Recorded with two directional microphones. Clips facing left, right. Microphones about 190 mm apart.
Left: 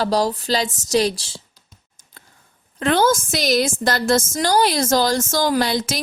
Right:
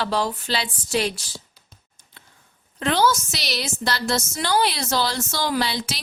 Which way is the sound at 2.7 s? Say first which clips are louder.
Left 3 dB; 50° left (ahead or behind).